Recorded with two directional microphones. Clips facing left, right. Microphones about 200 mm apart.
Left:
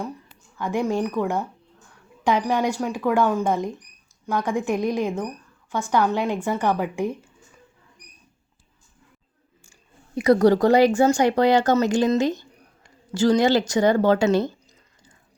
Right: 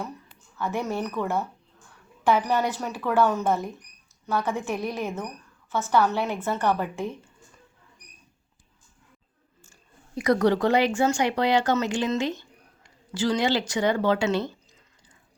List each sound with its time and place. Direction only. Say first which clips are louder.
0.5 s a woman's voice: left 5 dB; 15° left (ahead or behind)
10.2 s a woman's voice: left 5 dB; 30° left (ahead or behind)